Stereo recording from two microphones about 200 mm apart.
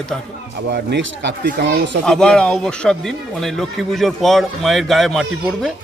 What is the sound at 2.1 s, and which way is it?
A man's voice, 5° left (ahead or behind).